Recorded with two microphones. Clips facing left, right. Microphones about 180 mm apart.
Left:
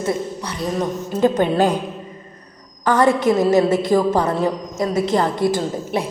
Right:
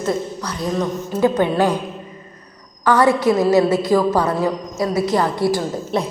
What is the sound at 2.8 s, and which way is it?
Speech, 45° left (ahead or behind).